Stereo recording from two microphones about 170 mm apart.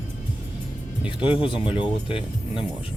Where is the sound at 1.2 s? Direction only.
30° left (ahead or behind).